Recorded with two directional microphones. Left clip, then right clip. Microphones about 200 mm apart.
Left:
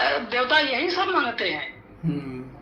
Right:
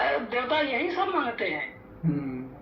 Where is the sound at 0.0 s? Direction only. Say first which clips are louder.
Left 4 dB; 20° left (ahead or behind).